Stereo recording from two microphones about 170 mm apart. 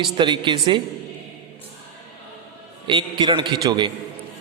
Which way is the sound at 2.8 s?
30° right (ahead or behind).